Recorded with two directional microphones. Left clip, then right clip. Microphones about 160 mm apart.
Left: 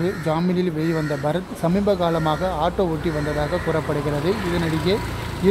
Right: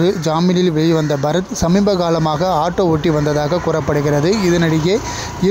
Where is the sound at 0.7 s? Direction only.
40° right (ahead or behind).